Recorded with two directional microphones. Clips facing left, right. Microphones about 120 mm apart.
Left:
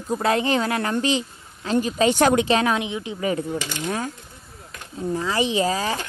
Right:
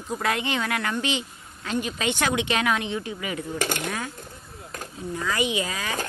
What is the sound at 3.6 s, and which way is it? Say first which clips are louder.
Speech: right 2 dB; 50° right (ahead or behind).